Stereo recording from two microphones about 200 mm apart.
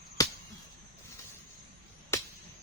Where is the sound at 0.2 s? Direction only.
15° left (ahead or behind).